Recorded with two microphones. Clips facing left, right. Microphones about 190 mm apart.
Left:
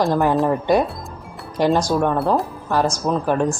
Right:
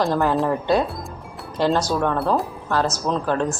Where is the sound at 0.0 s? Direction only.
15° left (ahead or behind).